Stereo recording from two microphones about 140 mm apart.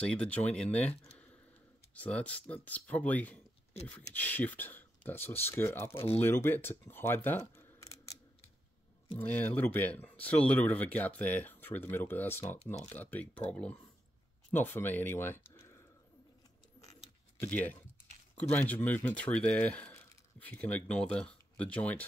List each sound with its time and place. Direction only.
0.0 s speech: 5° left (ahead or behind)
9.2 s speech: 10° left (ahead or behind)
16.8 s keys jangling: 55° left (ahead or behind)
17.4 s speech: 10° left (ahead or behind)